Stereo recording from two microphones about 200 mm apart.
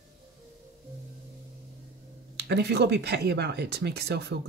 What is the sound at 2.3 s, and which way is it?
Speech, 55° right (ahead or behind).